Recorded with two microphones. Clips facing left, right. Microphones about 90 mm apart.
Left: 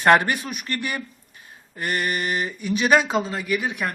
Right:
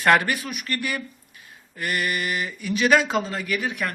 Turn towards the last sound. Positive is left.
turn(degrees=20)  # may be behind; listen again after turning